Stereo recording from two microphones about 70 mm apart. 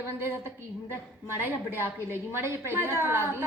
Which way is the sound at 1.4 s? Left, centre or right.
Right.